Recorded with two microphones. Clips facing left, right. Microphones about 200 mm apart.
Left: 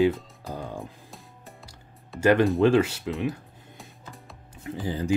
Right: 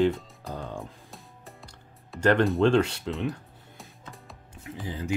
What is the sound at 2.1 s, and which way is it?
Speech, 5° left (ahead or behind).